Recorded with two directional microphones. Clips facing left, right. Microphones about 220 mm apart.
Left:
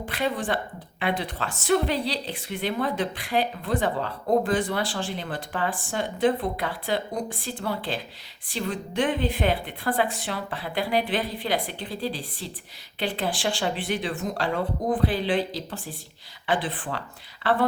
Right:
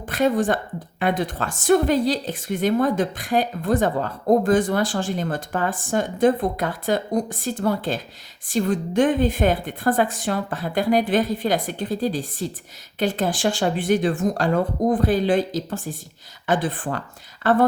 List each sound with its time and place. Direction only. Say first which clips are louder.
0.1 s a woman's voice: right 8 dB; 45° right (ahead or behind)